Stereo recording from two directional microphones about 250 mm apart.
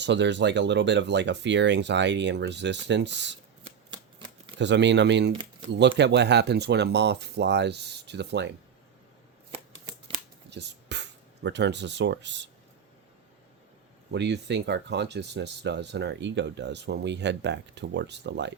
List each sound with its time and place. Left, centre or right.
0.0 s speech: right
3.9 s shuffling cards: centre
4.5 s speech: right
5.3 s speech: centre
6.0 s speech: right
10.5 s speech: right
14.1 s speech: right